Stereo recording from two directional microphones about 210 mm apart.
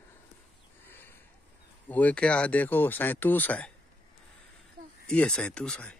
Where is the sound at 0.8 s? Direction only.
10° left (ahead or behind).